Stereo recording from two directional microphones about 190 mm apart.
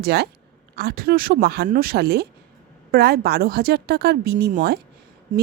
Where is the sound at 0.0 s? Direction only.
55° right (ahead or behind).